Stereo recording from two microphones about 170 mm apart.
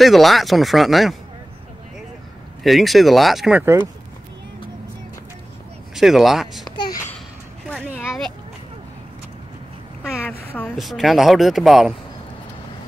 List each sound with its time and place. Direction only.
0.0 s speech: centre (ahead or behind)
2.6 s speech: centre (ahead or behind)
3.6 s speech: 15° right (ahead or behind)
5.9 s speech: centre (ahead or behind)
8.0 s a sound: 5° right (ahead or behind)
10.8 s speech: centre (ahead or behind)